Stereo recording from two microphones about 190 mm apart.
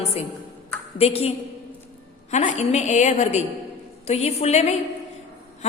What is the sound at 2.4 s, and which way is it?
A woman's voice, 35° left (ahead or behind).